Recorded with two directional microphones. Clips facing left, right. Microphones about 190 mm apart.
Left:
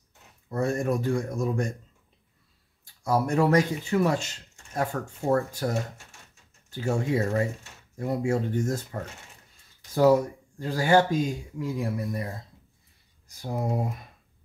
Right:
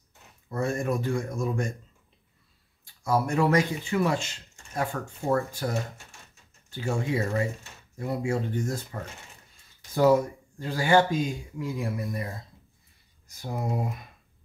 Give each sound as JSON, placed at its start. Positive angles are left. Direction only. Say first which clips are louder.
{"t": 0.5, "sound": "speech", "louder": "left 2 dB", "side_deg": 40}
{"t": 2.8, "sound": "speech", "louder": "left 1 dB", "side_deg": 40}
{"t": 13.3, "sound": "speech", "louder": "left 2 dB", "side_deg": 30}